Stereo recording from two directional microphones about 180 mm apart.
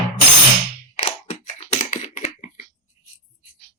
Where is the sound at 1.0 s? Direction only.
35° left (ahead or behind).